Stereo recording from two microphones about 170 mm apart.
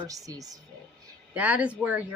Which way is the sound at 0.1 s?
20° right (ahead or behind).